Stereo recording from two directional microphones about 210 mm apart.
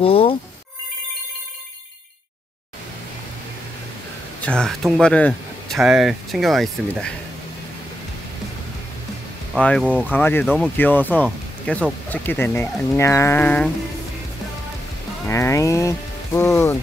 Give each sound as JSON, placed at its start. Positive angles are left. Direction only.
{"t": 0.0, "sound": "speech", "side_deg": 25}
{"t": 4.4, "sound": "speech", "side_deg": 5}
{"t": 9.5, "sound": "speech", "side_deg": 5}
{"t": 11.2, "sound": "a sound", "side_deg": 5}
{"t": 12.1, "sound": "speech", "side_deg": 10}
{"t": 15.2, "sound": "speech", "side_deg": 15}